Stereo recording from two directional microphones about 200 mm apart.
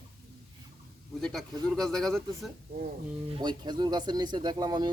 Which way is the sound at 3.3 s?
20° right (ahead or behind).